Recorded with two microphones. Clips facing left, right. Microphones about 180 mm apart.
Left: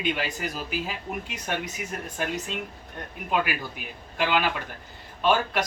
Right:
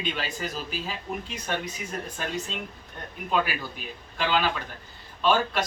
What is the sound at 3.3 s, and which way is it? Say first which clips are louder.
A man's voice: even; 15° left (ahead or behind).